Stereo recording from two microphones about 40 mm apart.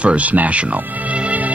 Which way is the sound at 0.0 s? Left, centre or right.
Right.